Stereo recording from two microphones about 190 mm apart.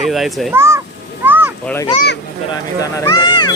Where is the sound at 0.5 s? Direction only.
15° right (ahead or behind).